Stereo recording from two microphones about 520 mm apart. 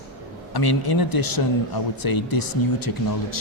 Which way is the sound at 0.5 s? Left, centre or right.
Left.